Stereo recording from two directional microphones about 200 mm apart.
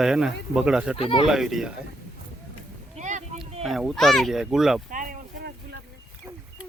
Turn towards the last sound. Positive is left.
turn(degrees=-45)  # may be behind; listen again after turning